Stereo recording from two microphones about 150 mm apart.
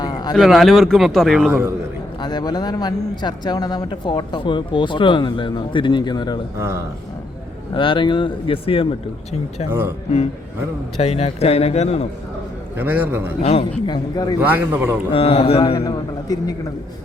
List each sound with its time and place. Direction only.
0.0 s a sound: 30° left (ahead or behind)
0.3 s speech: centre (ahead or behind)
1.5 s a man's voice: 10° right (ahead or behind)
2.2 s a man's voice: 30° left (ahead or behind)
7.7 s speech: 35° left (ahead or behind)
9.6 s a man's voice: 15° right (ahead or behind)
10.9 s a man's voice: 40° left (ahead or behind)
12.7 s a man's voice: 15° right (ahead or behind)
13.4 s a man's voice: 45° left (ahead or behind)
13.8 s a man's voice: 30° left (ahead or behind)
14.4 s a man's voice: 10° right (ahead or behind)
15.1 s speech: 40° left (ahead or behind)
15.7 s a man's voice: 25° left (ahead or behind)